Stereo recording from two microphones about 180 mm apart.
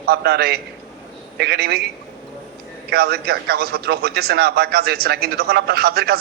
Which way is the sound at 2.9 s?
60° right (ahead or behind).